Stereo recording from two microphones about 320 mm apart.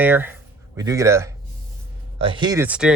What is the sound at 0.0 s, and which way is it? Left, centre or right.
Speech, centre.